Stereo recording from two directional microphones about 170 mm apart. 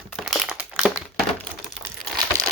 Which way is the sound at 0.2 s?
Centre (ahead or behind).